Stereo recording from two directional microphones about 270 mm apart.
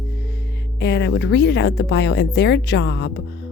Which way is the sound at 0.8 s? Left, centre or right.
Left.